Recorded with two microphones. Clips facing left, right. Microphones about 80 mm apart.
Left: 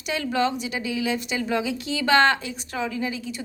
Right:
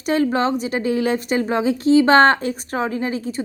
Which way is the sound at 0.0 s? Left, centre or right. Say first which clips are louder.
Right 6 dB; right.